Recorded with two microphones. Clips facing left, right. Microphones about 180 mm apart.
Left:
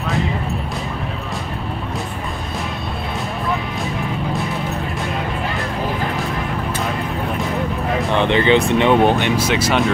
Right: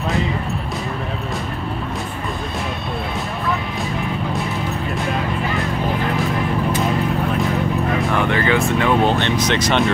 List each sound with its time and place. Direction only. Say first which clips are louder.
8.1 s speech: left 6 dB; 20° left (ahead or behind); by 9.8 s 5° left (ahead or behind)